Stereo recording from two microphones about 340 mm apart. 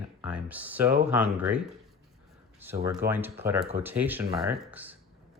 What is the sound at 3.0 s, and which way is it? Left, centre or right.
Speech, right.